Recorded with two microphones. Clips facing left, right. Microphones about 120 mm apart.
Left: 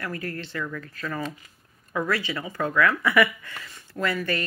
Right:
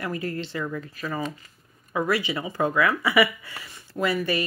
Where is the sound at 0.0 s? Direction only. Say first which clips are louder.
Right 3 dB; 20° right (ahead or behind).